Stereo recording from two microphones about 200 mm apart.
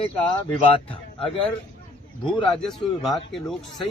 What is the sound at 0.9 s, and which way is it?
Speech, 25° left (ahead or behind).